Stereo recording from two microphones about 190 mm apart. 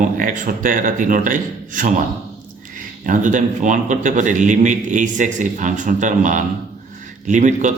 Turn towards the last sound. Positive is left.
turn(degrees=-40)  # may be behind; listen again after turning